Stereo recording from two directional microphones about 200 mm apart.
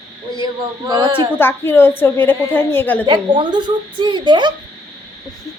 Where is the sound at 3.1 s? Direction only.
20° right (ahead or behind).